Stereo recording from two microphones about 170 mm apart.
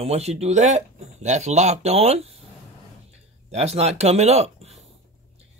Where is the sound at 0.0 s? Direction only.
40° right (ahead or behind).